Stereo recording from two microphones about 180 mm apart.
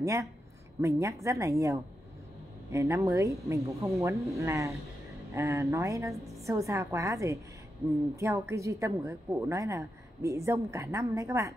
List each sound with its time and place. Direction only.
0.0 s a woman's voice: 15° right (ahead or behind)